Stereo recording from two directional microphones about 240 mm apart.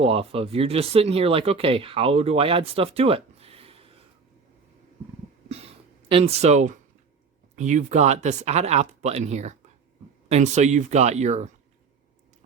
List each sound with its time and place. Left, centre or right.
0.0 s speech: right
5.5 s a sound: right
7.5 s speech: right